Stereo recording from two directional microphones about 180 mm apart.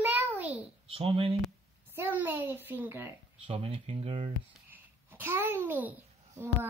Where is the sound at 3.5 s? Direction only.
30° right (ahead or behind).